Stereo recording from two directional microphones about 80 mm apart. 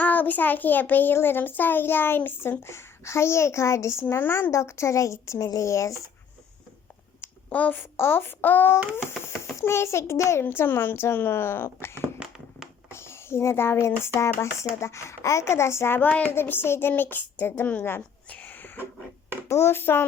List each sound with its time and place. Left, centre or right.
0.0 s a child's voice: left
7.2 s a child's voice: left
12.2 s a sound: centre
12.9 s a child's voice: left
18.3 s a sound: left
19.5 s a child's voice: left